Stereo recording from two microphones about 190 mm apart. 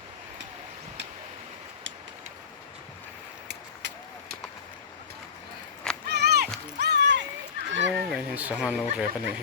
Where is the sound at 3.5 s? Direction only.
65° right (ahead or behind).